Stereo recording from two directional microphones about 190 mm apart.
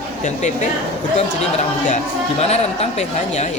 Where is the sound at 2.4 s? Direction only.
35° left (ahead or behind).